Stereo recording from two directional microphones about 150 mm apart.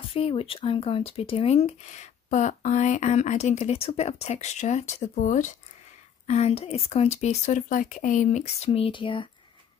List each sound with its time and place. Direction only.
0.1 s speech: 40° left (ahead or behind); by 5.6 s 55° left (ahead or behind)
6.2 s speech: 45° left (ahead or behind)
8.6 s speech: 35° left (ahead or behind)